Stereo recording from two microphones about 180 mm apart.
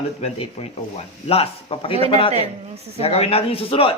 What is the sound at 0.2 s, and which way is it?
Speech, 35° left (ahead or behind).